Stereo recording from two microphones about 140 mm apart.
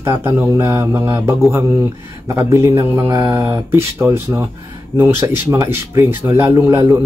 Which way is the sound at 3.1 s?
25° right (ahead or behind).